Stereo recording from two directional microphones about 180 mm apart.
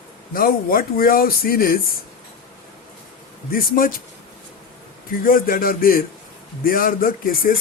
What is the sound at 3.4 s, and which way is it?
Speech, 55° left (ahead or behind).